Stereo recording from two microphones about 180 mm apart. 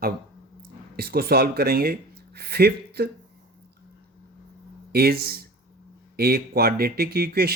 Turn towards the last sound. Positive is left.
turn(degrees=-60)  # may be behind; listen again after turning